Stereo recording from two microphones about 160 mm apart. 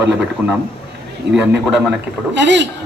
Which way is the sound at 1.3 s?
90° right.